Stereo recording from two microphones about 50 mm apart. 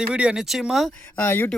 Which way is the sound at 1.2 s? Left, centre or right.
Left.